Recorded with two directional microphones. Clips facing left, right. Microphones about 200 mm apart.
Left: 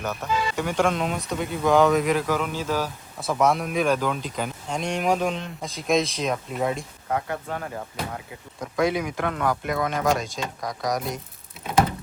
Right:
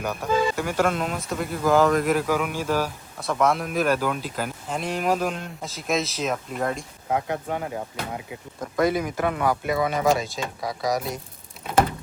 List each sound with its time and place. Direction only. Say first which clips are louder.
0.0 s speech: right 1 dB; 10° right (ahead or behind)
0.3 s speech: right 5 dB; 50° right (ahead or behind)
0.5 s speech: even; 5° right (ahead or behind)
3.2 s speech: left 1 dB; centre (ahead or behind)
7.3 s speech: right 3 dB; 15° right (ahead or behind)
8.1 s speech: right 3 dB; 5° right (ahead or behind)